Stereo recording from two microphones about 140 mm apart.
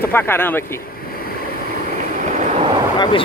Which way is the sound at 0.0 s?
15° left (ahead or behind).